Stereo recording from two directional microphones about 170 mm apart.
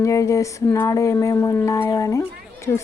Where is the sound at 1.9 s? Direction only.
20° left (ahead or behind).